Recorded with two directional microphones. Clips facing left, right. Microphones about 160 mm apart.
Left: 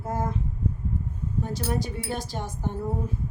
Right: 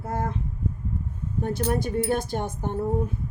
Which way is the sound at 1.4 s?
55° right (ahead or behind).